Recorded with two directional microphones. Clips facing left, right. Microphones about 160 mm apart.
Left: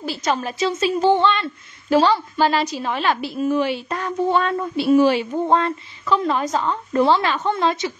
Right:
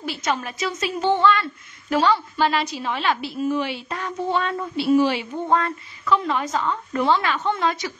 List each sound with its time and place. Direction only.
0.0 s a woman's voice: 35° left (ahead or behind)
5.5 s a woman's voice: 30° left (ahead or behind)